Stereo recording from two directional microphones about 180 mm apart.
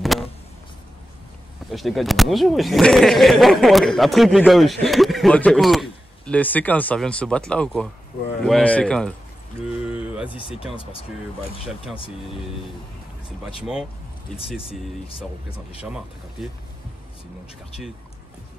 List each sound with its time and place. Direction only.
1.7 s speech: centre (ahead or behind)
9.8 s a sound: 5° right (ahead or behind)
14.6 s speech: 30° left (ahead or behind)
15.8 s speech: 5° right (ahead or behind)